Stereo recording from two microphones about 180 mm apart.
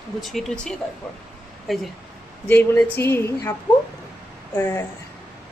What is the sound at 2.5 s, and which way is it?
Speech, 10° left (ahead or behind).